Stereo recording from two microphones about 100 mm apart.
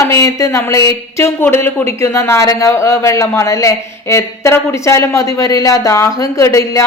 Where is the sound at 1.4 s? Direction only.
25° left (ahead or behind).